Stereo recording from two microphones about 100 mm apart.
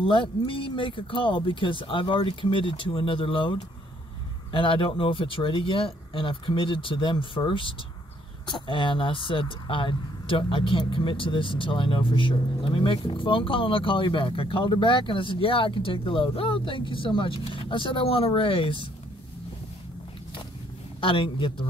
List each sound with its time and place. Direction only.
0.0 s speech: 55° left (ahead or behind)
21.0 s speech: 60° left (ahead or behind)